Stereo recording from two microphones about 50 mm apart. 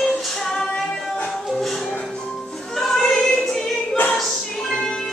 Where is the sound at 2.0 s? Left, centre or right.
Centre.